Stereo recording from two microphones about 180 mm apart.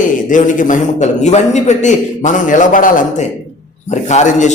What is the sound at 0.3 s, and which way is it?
A man's voice, 45° left (ahead or behind).